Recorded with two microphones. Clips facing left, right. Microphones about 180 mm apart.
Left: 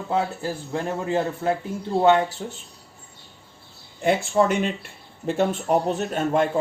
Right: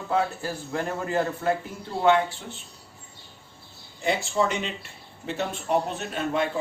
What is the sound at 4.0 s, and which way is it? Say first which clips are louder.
Speech: left 5 dB; 55° left (ahead or behind).